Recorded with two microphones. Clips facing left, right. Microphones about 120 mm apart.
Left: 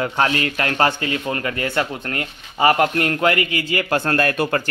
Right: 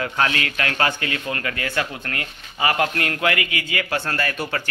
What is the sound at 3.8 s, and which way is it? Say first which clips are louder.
Speech: left 6 dB; 50° left (ahead or behind).